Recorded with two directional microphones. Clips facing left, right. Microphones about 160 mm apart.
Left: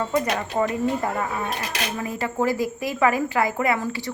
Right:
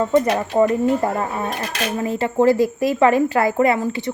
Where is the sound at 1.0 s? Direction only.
35° right (ahead or behind).